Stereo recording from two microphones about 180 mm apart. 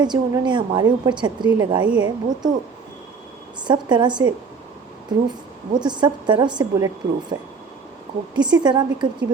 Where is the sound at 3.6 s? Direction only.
25° right (ahead or behind).